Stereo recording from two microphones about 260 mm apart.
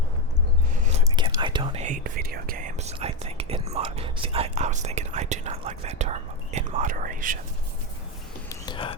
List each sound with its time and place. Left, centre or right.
1.0 s speech: centre
8.4 s whispering: centre